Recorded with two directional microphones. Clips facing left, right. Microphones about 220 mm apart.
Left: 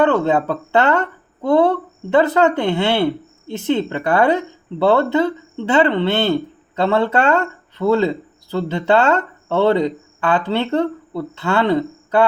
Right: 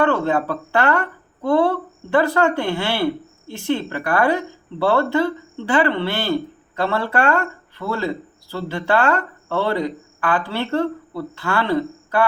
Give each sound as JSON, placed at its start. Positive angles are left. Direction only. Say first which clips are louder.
{"t": 0.0, "sound": "speech", "louder": "left 3 dB", "side_deg": 20}